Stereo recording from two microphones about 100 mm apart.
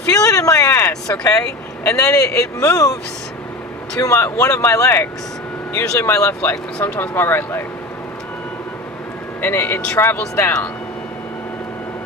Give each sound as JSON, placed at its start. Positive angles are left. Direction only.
{"t": 0.1, "sound": "speech", "side_deg": 35}
{"t": 1.1, "sound": "speech", "side_deg": 10}
{"t": 1.9, "sound": "speech", "side_deg": 35}
{"t": 4.0, "sound": "speech", "side_deg": 30}
{"t": 6.8, "sound": "speech", "side_deg": 20}
{"t": 9.4, "sound": "speech", "side_deg": 25}